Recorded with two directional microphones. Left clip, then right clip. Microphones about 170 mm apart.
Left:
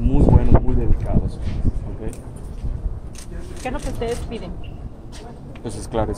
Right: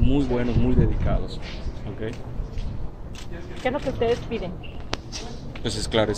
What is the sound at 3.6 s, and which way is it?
Speech, 45° right (ahead or behind).